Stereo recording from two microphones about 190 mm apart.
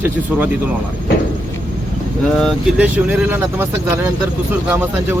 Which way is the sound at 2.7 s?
10° right (ahead or behind).